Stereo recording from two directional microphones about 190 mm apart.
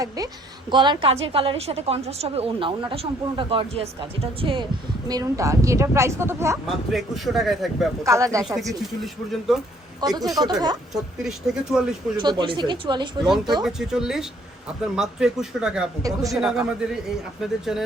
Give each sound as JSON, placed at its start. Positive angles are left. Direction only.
{"t": 0.2, "sound": "a woman's voice", "side_deg": -20}
{"t": 6.9, "sound": "a man's voice", "side_deg": 0}
{"t": 8.0, "sound": "a woman's voice", "side_deg": -15}
{"t": 8.4, "sound": "a man's voice", "side_deg": 0}
{"t": 10.0, "sound": "a woman's voice", "side_deg": -20}
{"t": 10.9, "sound": "a man's voice", "side_deg": 0}
{"t": 12.1, "sound": "a woman's voice", "side_deg": -25}
{"t": 13.2, "sound": "a man's voice", "side_deg": 0}
{"t": 16.0, "sound": "a woman's voice", "side_deg": -20}
{"t": 16.4, "sound": "a man's voice", "side_deg": -5}